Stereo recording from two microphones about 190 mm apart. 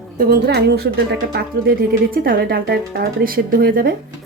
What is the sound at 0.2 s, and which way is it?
Speech, 55° right (ahead or behind).